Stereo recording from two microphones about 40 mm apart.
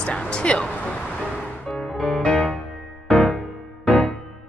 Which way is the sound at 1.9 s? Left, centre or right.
Centre.